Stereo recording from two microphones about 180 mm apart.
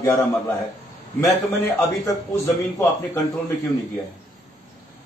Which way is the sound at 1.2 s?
15° left (ahead or behind).